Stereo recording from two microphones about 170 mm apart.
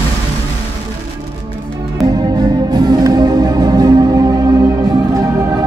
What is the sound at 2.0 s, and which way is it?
Music, 25° right (ahead or behind).